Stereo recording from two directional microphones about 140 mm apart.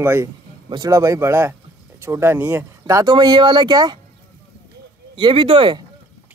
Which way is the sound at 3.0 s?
30° right (ahead or behind).